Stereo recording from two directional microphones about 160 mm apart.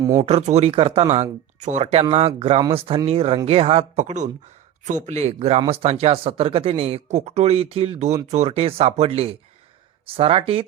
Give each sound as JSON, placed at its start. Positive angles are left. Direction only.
{"t": 0.2, "sound": "speech", "side_deg": -40}